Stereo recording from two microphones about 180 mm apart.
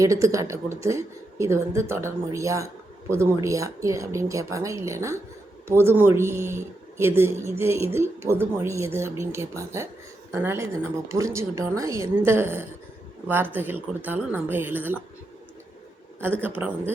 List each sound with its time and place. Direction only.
0.0 s speech: 20° right (ahead or behind)
16.4 s speech: 10° right (ahead or behind)